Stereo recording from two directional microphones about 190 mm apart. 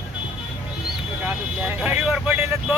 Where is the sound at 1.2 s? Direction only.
5° right (ahead or behind).